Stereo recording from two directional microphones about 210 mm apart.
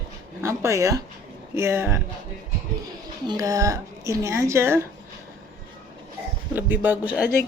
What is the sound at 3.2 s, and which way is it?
Speech, 20° right (ahead or behind).